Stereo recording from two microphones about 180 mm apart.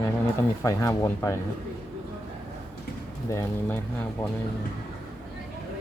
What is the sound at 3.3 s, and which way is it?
Speech, 15° left (ahead or behind).